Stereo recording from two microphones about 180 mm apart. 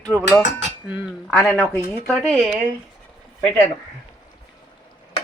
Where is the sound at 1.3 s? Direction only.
5° left (ahead or behind).